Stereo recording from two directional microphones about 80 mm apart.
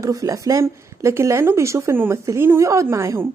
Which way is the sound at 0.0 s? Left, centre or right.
Right.